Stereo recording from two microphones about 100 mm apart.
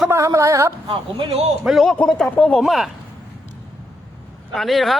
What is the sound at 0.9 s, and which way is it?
Speech, 70° right (ahead or behind).